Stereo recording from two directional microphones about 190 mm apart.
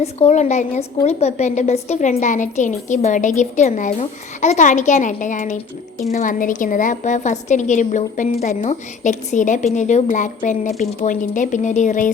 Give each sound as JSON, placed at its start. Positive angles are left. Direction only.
{"t": 0.0, "sound": "a woman's voice", "side_deg": 35}